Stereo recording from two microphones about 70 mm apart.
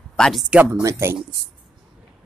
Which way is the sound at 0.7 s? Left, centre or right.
Right.